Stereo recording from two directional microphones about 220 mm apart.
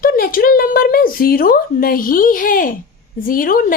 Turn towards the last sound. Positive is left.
turn(degrees=40)  # may be behind; listen again after turning